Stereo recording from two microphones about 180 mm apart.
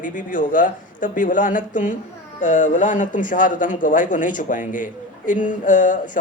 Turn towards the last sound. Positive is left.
turn(degrees=45)  # may be behind; listen again after turning